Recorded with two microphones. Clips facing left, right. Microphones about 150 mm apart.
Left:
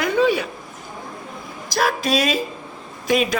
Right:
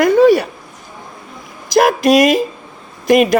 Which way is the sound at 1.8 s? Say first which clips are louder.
Right 10 dB; 75° right (ahead or behind).